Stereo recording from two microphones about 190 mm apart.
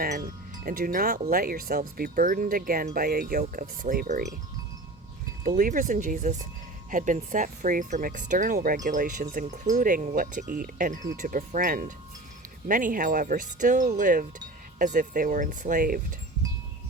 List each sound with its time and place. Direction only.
0.6 s speech: 50° right (ahead or behind)
5.5 s speech: 45° right (ahead or behind)